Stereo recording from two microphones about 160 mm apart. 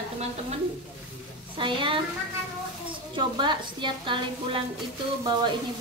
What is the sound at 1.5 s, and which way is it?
Speech, 30° right (ahead or behind).